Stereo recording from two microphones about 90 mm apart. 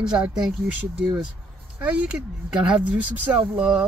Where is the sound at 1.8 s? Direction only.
15° right (ahead or behind).